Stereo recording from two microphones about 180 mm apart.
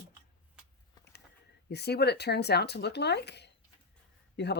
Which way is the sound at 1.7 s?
65° left (ahead or behind).